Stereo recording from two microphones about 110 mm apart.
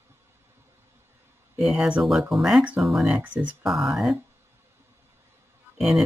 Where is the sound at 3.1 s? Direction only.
15° right (ahead or behind).